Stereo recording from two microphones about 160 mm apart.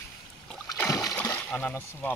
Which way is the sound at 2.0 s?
10° left (ahead or behind).